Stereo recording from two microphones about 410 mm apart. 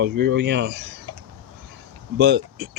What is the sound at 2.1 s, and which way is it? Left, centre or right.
Speech, right.